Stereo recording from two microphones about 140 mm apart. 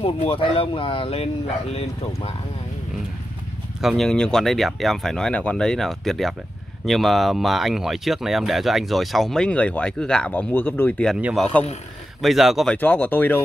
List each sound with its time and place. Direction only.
0.0 s speech: 40° left (ahead or behind)
3.8 s speech: centre (ahead or behind)
11.1 s speech: 10° right (ahead or behind)
12.7 s speech: 15° left (ahead or behind)